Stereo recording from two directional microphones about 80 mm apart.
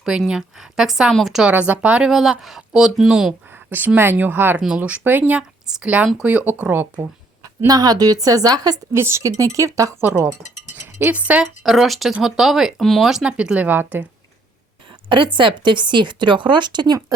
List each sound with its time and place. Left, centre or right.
0.0 s speech: centre
1.5 s speech: centre
3.5 s speech: right
4.5 s speech: centre
4.8 s speech: right
7.7 s a woman's voice: right
8.9 s a woman's voice: right
10.0 s speech: right
10.8 s cutlery: right
11.6 s speech: centre
13.3 s speech: centre
15.1 s speech: right